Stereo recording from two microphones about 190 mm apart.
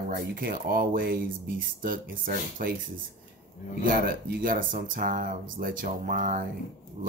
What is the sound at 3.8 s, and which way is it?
Speech, 50° right (ahead or behind).